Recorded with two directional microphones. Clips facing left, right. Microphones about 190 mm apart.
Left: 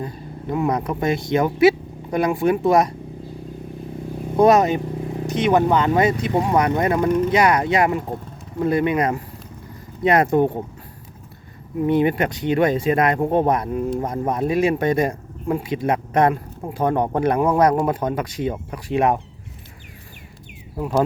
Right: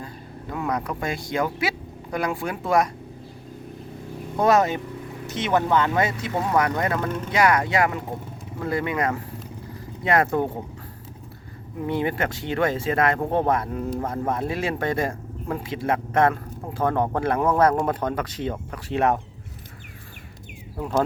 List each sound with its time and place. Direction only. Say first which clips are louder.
0.0 s speech: left 7 dB; 20° left (ahead or behind)
4.4 s speech: left 5 dB; 15° left (ahead or behind)
11.9 s speech: left 6 dB; 20° left (ahead or behind)